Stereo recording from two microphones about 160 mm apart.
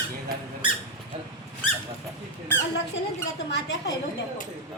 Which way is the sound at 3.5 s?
90° left.